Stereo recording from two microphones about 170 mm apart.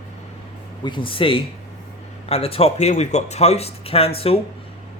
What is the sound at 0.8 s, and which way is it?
A man's voice, 30° left (ahead or behind).